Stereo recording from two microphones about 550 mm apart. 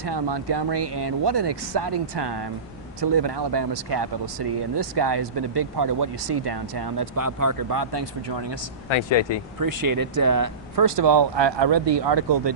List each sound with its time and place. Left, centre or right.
0.1 s speech: right
8.8 s speech: left
9.6 s speech: right